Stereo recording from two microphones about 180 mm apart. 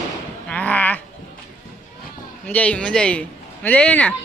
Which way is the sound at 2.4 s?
10° left (ahead or behind).